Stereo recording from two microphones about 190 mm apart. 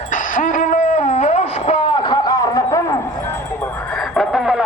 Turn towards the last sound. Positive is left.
turn(degrees=0)  # may be behind; listen again after turning